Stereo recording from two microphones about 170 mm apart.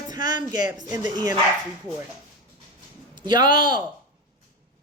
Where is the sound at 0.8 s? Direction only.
25° right (ahead or behind).